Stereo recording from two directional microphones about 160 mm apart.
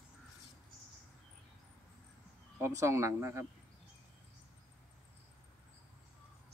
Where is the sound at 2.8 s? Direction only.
20° right (ahead or behind).